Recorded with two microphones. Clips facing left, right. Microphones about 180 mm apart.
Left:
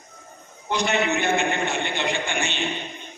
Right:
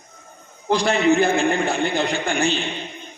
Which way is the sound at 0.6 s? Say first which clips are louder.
Right 6 dB; 30° right (ahead or behind).